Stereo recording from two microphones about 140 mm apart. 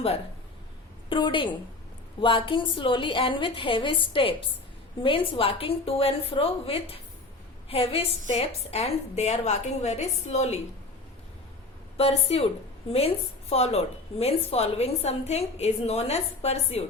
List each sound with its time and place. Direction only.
1.1 s a woman's voice: 35° left (ahead or behind); by 10.6 s 50° left (ahead or behind)
11.9 s a woman's voice: 45° left (ahead or behind)
13.5 s a woman's voice: 45° left (ahead or behind)